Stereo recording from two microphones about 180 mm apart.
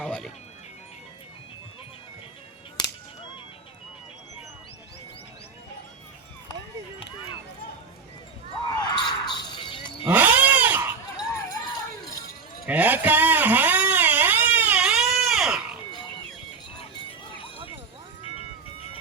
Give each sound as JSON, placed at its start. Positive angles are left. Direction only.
{"t": 0.0, "sound": "music", "side_deg": 5}
{"t": 8.8, "sound": "music", "side_deg": 25}
{"t": 10.1, "sound": "cat", "side_deg": -10}
{"t": 11.2, "sound": "a sound", "side_deg": 20}
{"t": 12.6, "sound": "a sound", "side_deg": -10}
{"t": 18.2, "sound": "music", "side_deg": 35}